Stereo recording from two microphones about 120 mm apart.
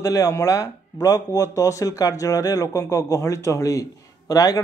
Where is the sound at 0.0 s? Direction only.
30° left (ahead or behind).